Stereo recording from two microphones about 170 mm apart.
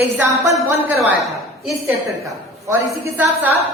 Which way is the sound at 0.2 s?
20° right (ahead or behind).